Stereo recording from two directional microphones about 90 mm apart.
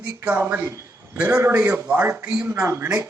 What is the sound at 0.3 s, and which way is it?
A man's voice, 15° right (ahead or behind).